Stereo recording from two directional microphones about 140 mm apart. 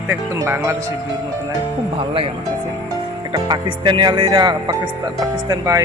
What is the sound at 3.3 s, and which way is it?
Speech, 35° right (ahead or behind).